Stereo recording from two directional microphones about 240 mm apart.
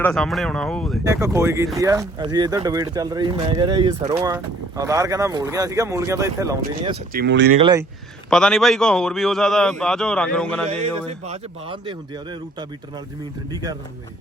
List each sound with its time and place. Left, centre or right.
0.0 s a man's voice: centre
1.0 s speech: centre
7.1 s speech: right
7.6 s speech: centre
8.3 s a man's voice: centre
10.7 s speech: right